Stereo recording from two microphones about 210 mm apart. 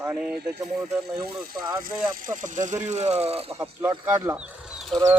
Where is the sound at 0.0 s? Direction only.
5° right (ahead or behind).